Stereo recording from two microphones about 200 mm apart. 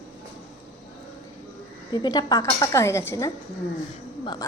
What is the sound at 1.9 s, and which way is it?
Speech, 20° left (ahead or behind).